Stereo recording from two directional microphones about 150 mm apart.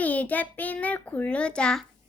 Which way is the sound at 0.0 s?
10° left (ahead or behind).